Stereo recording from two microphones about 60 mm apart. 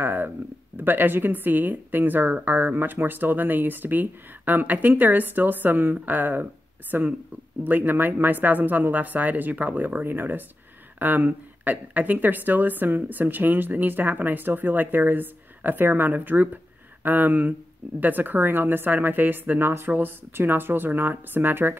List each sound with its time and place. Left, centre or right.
0.0 s a sound: right
0.7 s speech: right
19.6 s speech: right